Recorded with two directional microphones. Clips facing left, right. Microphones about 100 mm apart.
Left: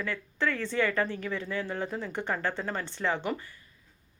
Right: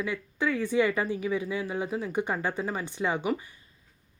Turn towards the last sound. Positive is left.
turn(degrees=-15)  # may be behind; listen again after turning